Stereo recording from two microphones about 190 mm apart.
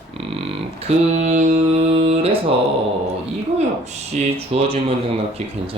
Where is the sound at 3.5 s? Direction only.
35° right (ahead or behind).